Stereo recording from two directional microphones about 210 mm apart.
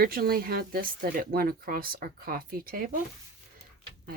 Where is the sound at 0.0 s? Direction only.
45° right (ahead or behind).